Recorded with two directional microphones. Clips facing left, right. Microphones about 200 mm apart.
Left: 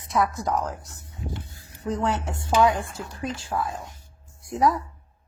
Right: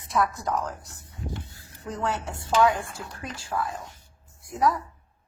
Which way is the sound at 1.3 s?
20° left (ahead or behind).